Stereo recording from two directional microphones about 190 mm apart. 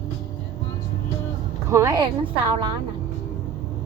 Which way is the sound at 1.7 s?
20° right (ahead or behind).